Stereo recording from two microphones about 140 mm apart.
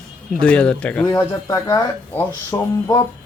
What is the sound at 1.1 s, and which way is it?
Speech, 25° left (ahead or behind).